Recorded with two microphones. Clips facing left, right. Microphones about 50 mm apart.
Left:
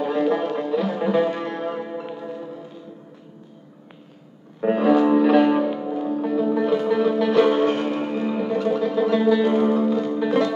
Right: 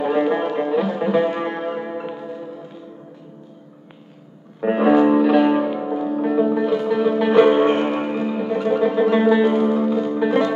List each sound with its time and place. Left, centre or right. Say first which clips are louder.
0.0 s music: right 2 dB; right
0.8 s music: right 2 dB; centre
2.2 s music: right 1 dB; centre
4.6 s music: right 2 dB; centre
5.2 s music: right 1 dB; centre; by 6.5 s right
6.5 s music: right 1 dB; centre
7.2 s music: right 6 dB; right
8.2 s music: right 1 dB; centre; by 9.5 s right
9.5 s music: right 1 dB; centre